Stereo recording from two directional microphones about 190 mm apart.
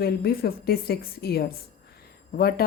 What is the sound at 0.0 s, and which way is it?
A woman's voice, 55° left (ahead or behind).